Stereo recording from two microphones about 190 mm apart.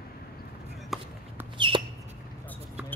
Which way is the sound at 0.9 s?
Centre (ahead or behind).